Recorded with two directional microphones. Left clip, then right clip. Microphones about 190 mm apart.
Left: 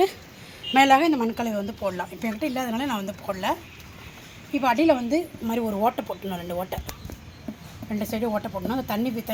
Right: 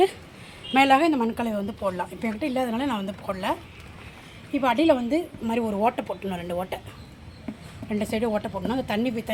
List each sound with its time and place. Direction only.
0.7 s a woman's voice: 5° right (ahead or behind)
7.9 s speech: 10° right (ahead or behind)